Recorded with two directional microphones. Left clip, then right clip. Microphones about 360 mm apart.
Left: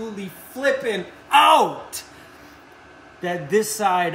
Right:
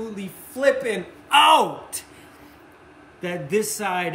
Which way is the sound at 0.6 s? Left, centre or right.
Centre.